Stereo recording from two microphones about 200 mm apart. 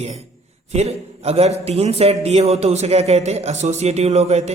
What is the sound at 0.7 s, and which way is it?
A man's voice, 30° right (ahead or behind).